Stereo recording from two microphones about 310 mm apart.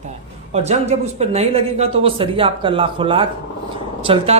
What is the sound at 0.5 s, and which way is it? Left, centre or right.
A man's voice, right.